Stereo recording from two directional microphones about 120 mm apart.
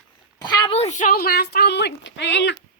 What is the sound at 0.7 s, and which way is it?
Speech, 80° left.